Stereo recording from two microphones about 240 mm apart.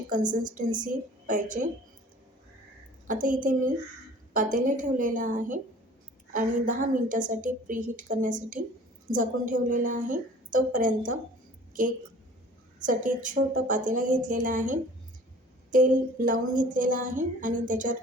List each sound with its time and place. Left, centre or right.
0.1 s a woman's voice: right
3.1 s a woman's voice: right